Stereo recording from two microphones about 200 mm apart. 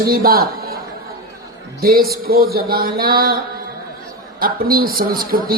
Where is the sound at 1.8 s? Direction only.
50° right (ahead or behind).